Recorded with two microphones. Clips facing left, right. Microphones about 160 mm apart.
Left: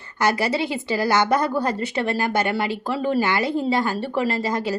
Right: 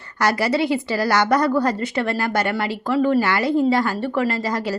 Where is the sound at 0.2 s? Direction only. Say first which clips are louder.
Right 2 dB; 25° left (ahead or behind).